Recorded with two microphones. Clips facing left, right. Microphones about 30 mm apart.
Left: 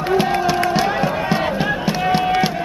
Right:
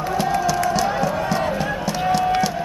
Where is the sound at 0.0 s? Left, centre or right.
Left.